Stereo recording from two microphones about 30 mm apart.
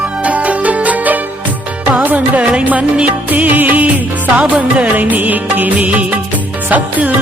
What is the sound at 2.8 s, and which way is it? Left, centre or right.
Music, right.